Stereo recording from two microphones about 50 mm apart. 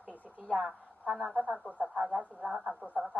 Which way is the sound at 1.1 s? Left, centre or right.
Centre.